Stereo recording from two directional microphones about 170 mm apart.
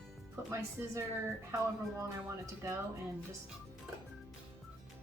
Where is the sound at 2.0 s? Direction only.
20° right (ahead or behind).